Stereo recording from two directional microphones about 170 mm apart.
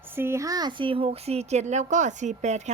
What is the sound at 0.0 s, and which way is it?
Speech, 15° right (ahead or behind).